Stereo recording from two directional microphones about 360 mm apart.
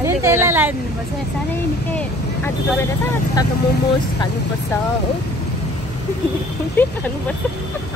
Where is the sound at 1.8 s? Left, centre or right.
Centre.